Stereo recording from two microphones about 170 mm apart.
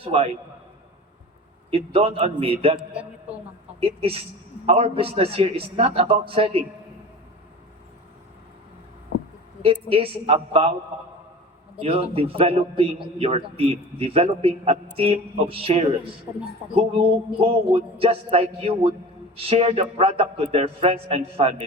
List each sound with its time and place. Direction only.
0.0 s a man's voice: 35° right (ahead or behind)
1.7 s a man's voice: 35° right (ahead or behind)
2.7 s a man's voice: 5° right (ahead or behind)
3.8 s a man's voice: 35° right (ahead or behind)
9.9 s a man's voice: 35° right (ahead or behind)
11.8 s a man's voice: 35° right (ahead or behind)